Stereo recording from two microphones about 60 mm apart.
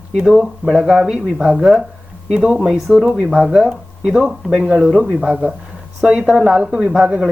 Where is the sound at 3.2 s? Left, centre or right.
Centre.